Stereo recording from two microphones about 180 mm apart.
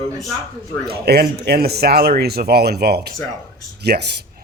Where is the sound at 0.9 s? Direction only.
60° right (ahead or behind).